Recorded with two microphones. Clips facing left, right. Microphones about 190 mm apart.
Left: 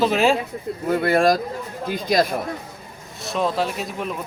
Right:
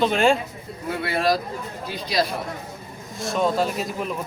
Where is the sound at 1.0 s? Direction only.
50° left (ahead or behind).